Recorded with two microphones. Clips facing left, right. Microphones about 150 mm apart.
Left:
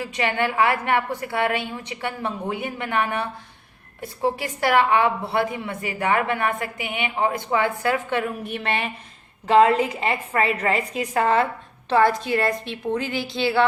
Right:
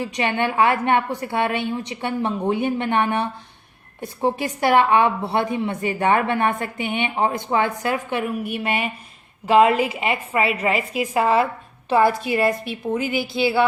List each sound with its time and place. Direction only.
0.0 s a woman's voice: 20° right (ahead or behind)